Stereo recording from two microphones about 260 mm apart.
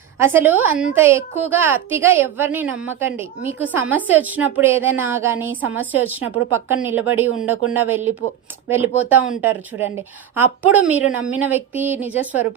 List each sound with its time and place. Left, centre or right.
0.2 s a woman's voice: centre